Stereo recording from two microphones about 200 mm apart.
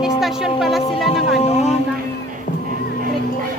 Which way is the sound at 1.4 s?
30° left (ahead or behind).